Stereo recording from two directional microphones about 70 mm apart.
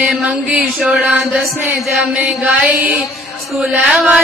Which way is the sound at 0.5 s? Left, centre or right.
Centre.